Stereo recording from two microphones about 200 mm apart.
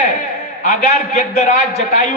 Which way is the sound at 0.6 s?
35° left (ahead or behind).